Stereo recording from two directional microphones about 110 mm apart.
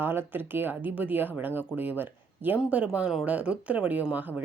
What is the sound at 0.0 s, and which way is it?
Speech, 20° right (ahead or behind).